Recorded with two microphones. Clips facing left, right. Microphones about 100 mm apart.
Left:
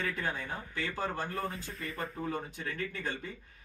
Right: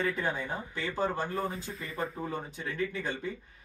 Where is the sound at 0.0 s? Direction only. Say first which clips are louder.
Right 4 dB; 20° right (ahead or behind).